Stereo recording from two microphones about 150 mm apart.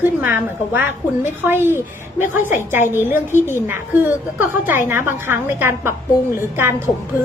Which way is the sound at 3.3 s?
15° left (ahead or behind).